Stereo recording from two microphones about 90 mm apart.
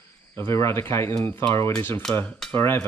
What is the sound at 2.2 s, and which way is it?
Speech, 10° left (ahead or behind).